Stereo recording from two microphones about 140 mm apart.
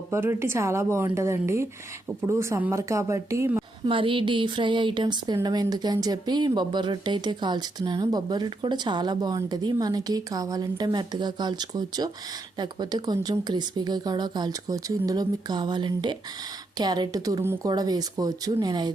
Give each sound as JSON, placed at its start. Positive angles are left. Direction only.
{"t": 0.1, "sound": "speech", "side_deg": -15}
{"t": 3.8, "sound": "speech", "side_deg": -40}
{"t": 17.4, "sound": "speech", "side_deg": -15}
{"t": 17.7, "sound": "speech", "side_deg": -30}